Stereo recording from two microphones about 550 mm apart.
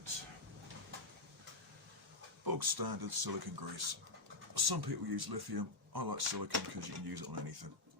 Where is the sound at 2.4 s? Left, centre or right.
Right.